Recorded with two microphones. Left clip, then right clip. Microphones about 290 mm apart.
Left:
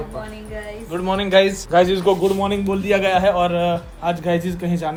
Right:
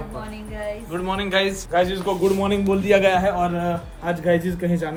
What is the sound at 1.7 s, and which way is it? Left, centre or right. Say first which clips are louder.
Speech: left 5 dB; left.